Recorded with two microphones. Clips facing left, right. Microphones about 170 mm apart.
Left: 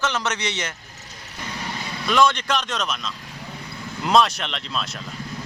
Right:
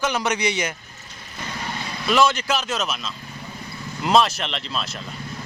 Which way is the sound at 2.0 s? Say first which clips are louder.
Even; 5° right (ahead or behind).